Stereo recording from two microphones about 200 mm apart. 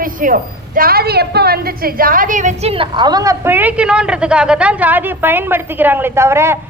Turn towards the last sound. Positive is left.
turn(degrees=-15)  # may be behind; listen again after turning